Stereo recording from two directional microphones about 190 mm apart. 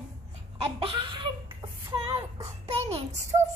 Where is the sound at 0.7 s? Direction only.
25° right (ahead or behind).